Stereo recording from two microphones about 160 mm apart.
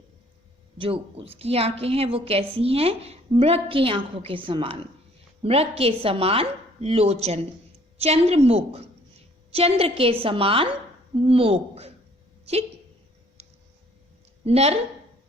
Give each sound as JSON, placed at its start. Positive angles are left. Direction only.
{"t": 0.8, "sound": "a woman's voice", "side_deg": -35}
{"t": 14.4, "sound": "a woman's voice", "side_deg": -40}